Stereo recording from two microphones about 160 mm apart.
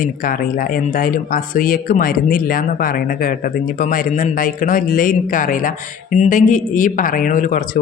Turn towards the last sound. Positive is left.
turn(degrees=55)  # may be behind; listen again after turning